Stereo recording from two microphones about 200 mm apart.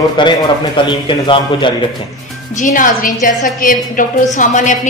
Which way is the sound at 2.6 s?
40° left (ahead or behind).